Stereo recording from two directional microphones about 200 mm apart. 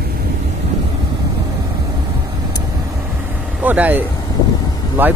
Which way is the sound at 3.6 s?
10° right (ahead or behind).